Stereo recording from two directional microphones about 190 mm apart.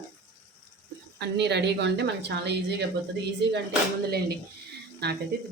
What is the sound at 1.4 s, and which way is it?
Speech, 65° right (ahead or behind).